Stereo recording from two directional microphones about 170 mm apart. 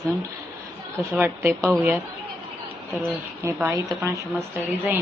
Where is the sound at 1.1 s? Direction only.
10° right (ahead or behind).